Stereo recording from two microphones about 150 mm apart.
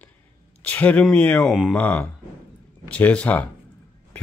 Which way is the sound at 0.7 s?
10° left (ahead or behind).